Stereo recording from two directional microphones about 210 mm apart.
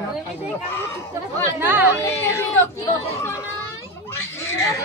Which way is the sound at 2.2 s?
10° left (ahead or behind).